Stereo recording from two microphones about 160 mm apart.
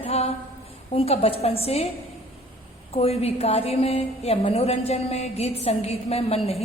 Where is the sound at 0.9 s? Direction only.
40° left (ahead or behind).